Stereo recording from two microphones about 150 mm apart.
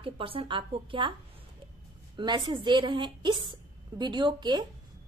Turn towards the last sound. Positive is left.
turn(degrees=-30)  # may be behind; listen again after turning